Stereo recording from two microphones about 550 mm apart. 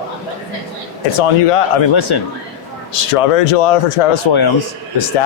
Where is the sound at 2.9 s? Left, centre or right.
Left.